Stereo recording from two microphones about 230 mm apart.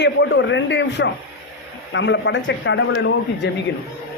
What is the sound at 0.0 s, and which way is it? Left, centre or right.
Speech, left.